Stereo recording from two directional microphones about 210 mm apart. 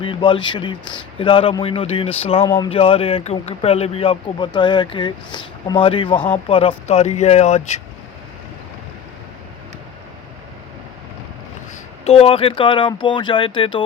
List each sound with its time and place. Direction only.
0.0 s speech: 25° left (ahead or behind)
2.4 s speech: 15° left (ahead or behind)
2.7 s speech: 25° left (ahead or behind)
12.0 s speech: 25° left (ahead or behind)